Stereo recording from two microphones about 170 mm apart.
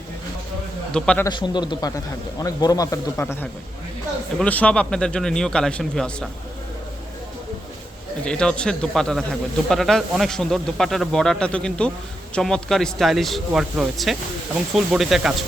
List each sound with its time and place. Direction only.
0.9 s speech: 5° left (ahead or behind)
1.2 s speech: 25° left (ahead or behind); by 6.2 s 5° left (ahead or behind)
8.2 s speech: 5° left (ahead or behind)